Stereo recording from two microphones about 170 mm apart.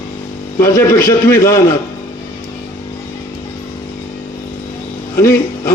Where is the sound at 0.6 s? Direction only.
15° left (ahead or behind).